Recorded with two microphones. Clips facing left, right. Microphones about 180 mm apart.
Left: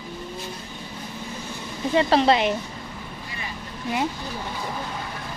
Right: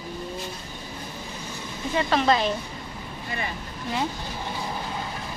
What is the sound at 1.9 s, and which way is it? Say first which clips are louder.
Speech: left 3 dB; 30° left (ahead or behind).